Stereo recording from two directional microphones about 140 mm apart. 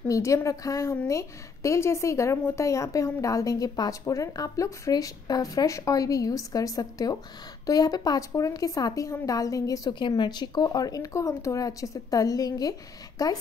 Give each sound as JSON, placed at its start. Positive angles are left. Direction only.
{"t": 0.1, "sound": "a woman's voice", "side_deg": 20}